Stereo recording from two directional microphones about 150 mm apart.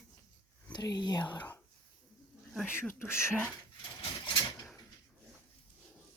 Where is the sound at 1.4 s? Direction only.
10° left (ahead or behind).